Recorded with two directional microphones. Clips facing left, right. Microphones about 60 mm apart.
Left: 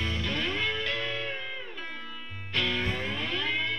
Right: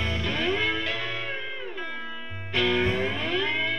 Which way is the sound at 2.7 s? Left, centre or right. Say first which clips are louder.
Right 6 dB; centre.